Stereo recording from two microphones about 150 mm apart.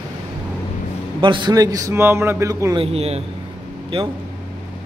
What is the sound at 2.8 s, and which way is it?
Speech, 45° right (ahead or behind).